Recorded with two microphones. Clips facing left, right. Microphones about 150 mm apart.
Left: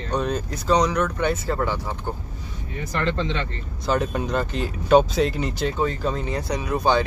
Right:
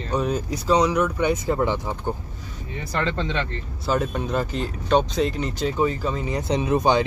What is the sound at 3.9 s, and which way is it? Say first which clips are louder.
Speech: left 1 dB; 5° right (ahead or behind).